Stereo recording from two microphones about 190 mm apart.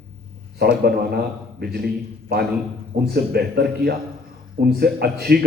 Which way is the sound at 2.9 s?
60° right (ahead or behind).